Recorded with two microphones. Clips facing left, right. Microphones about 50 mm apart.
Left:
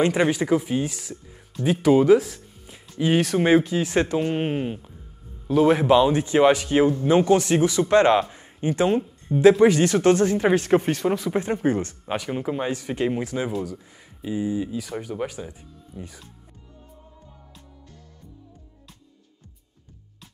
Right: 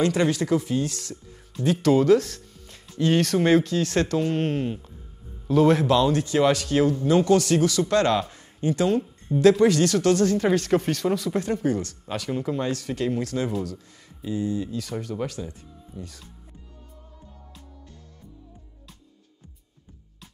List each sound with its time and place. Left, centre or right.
0.0 s speech: left